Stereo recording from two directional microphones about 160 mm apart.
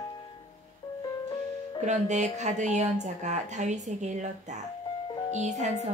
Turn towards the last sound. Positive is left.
turn(degrees=-45)  # may be behind; listen again after turning